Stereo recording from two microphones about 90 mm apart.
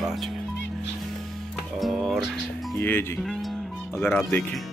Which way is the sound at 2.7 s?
25° left (ahead or behind).